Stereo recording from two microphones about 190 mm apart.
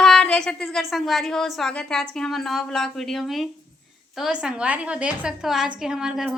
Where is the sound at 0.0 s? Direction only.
5° left (ahead or behind).